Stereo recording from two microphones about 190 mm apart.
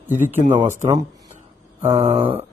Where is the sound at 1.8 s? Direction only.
30° right (ahead or behind).